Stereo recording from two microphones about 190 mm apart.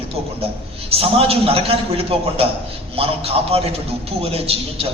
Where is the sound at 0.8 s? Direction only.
30° right (ahead or behind).